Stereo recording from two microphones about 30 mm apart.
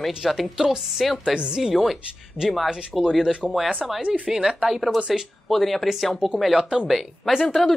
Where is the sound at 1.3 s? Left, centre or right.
Centre.